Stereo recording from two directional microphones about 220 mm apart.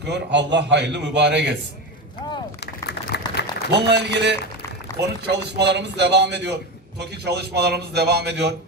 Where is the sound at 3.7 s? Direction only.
50° right (ahead or behind).